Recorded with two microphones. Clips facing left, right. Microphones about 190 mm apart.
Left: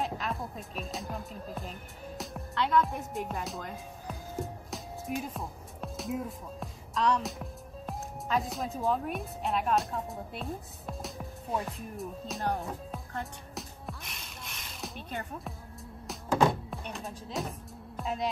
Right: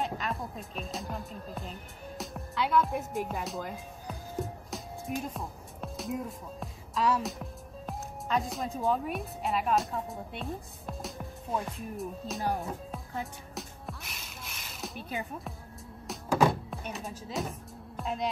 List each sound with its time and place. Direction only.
0.0 s speech: centre (ahead or behind)
16.1 s music: centre (ahead or behind)